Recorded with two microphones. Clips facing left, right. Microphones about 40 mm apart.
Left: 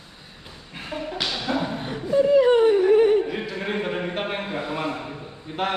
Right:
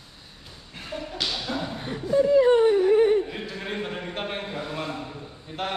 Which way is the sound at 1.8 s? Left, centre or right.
Left.